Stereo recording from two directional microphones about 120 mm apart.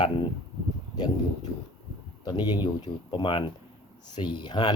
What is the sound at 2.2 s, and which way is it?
Speech, 35° left (ahead or behind).